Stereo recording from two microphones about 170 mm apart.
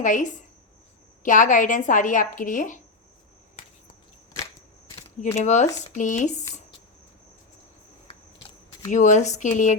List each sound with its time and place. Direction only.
0.0 s a woman's voice: 50° left (ahead or behind)
5.4 s a woman's voice: 45° left (ahead or behind)
8.9 s a woman's voice: 45° left (ahead or behind)